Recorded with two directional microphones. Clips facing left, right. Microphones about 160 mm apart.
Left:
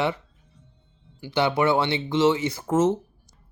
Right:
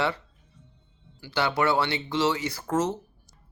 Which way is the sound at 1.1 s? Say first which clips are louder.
Left 4 dB; 20° left (ahead or behind).